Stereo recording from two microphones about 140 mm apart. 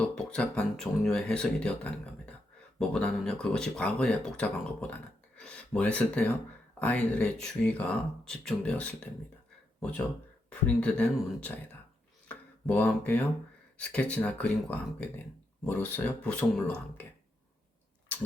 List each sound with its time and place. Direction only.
0.0 s speech: 5° left (ahead or behind)
10.8 s speech: 10° left (ahead or behind)
12.3 s a sound: 10° left (ahead or behind)
13.7 s speech: 10° left (ahead or behind)